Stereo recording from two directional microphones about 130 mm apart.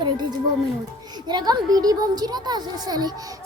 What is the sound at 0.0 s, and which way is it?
Speech, 35° right (ahead or behind).